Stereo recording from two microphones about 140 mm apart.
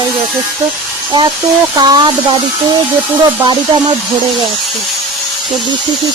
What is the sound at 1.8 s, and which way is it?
Speech, 30° right (ahead or behind).